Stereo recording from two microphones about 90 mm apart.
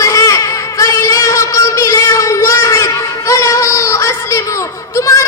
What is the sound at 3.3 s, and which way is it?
Music, 35° left (ahead or behind).